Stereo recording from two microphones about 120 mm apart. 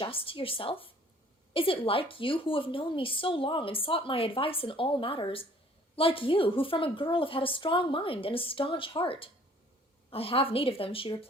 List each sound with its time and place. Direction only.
0.0 s a woman's voice: 50° left (ahead or behind)